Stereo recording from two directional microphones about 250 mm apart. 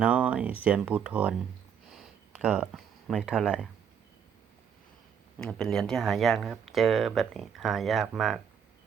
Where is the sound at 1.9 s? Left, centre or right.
Centre.